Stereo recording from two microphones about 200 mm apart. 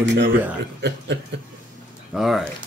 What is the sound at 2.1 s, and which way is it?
Speech, centre (ahead or behind).